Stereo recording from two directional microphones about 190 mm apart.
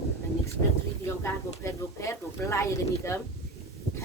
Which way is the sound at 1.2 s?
15° left (ahead or behind).